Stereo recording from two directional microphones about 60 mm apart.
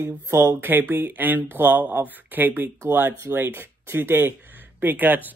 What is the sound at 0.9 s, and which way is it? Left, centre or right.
Speech, right.